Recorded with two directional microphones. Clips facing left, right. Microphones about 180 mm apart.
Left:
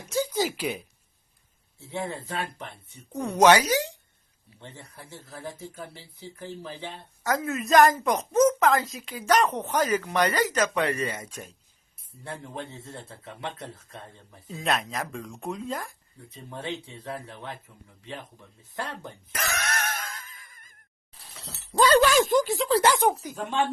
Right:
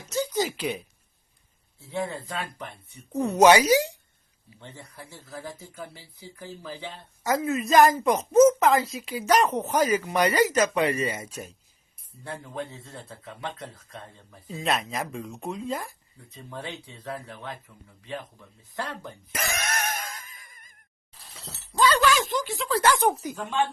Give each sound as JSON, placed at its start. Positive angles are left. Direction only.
{"t": 0.0, "sound": "a sound", "side_deg": 10}
{"t": 1.8, "sound": "a man's voice", "side_deg": 25}
{"t": 3.2, "sound": "a woman's voice", "side_deg": -5}
{"t": 4.9, "sound": "a man's voice", "side_deg": 25}
{"t": 7.3, "sound": "a woman's voice", "side_deg": 0}
{"t": 12.2, "sound": "a man's voice", "side_deg": 25}
{"t": 14.4, "sound": "speech", "side_deg": 0}
{"t": 16.3, "sound": "a man's voice", "side_deg": 25}
{"t": 19.3, "sound": "a sound", "side_deg": -10}
{"t": 21.8, "sound": "speech", "side_deg": 45}
{"t": 22.8, "sound": "speech", "side_deg": 15}